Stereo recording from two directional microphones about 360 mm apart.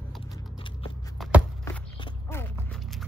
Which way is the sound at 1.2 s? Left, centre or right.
Centre.